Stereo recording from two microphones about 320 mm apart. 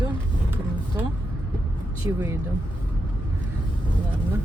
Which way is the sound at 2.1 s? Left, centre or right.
Centre.